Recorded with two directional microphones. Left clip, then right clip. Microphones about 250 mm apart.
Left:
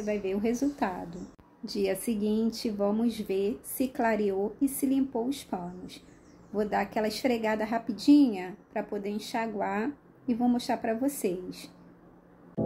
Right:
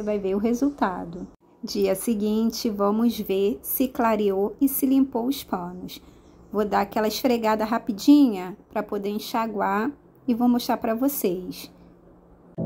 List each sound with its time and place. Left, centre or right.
0.0 s a woman's voice: right
12.6 s music: centre